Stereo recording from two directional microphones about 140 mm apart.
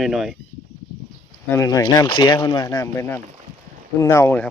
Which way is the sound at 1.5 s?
25° left (ahead or behind).